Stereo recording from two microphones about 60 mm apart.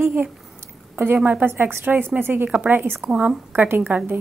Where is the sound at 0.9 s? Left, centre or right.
Right.